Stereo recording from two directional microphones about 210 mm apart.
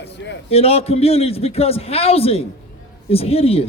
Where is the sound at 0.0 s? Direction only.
55° left (ahead or behind).